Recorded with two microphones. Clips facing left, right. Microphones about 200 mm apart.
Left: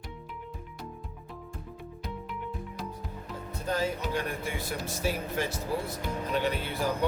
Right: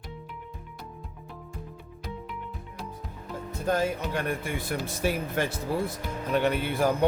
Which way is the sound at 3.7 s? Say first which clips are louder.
Right 3 dB; 55° right (ahead or behind).